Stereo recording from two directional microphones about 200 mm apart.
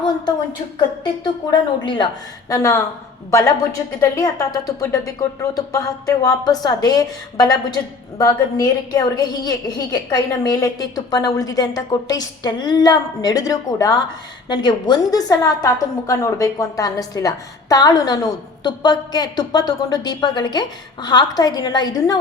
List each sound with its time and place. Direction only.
1.2 s a woman's voice: 25° left (ahead or behind)
4.0 s a woman's voice: 15° left (ahead or behind)